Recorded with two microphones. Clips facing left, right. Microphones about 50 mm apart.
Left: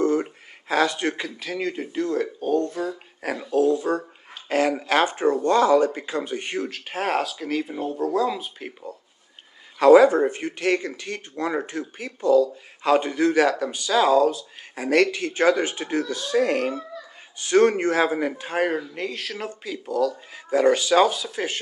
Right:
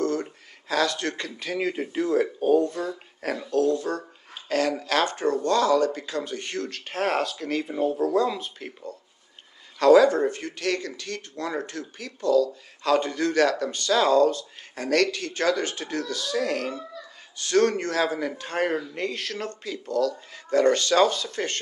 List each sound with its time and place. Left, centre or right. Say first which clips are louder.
0.0 s speech: left 4 dB; centre